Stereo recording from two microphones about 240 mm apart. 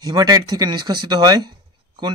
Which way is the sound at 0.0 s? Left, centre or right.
Centre.